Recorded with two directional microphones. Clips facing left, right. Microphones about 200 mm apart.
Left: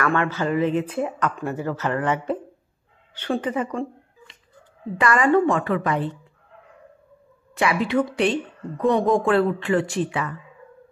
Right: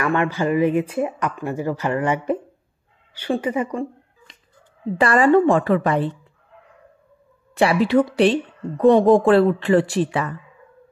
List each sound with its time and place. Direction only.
0.0 s speech: 15° right (ahead or behind)
4.9 s a woman's voice: 30° right (ahead or behind)
7.5 s a woman's voice: 35° right (ahead or behind)